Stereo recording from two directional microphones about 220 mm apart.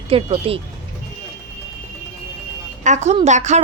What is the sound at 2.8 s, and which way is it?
Speech, 30° right (ahead or behind).